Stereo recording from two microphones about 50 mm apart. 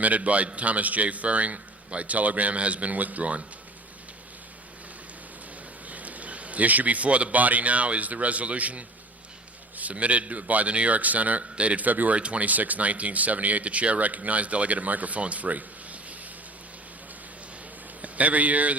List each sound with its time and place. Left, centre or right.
0.0 s speech: right
5.9 s speech: right
18.0 s speech: right